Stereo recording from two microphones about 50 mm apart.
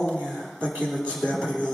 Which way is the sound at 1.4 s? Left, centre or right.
Centre.